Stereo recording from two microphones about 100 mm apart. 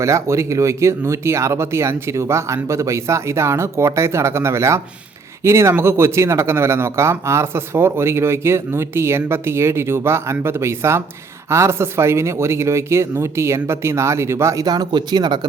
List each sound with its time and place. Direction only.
0.0 s speech: 30° right (ahead or behind); by 15.4 s 50° right (ahead or behind)